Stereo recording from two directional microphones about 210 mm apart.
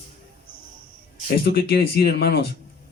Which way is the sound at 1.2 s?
45° left (ahead or behind).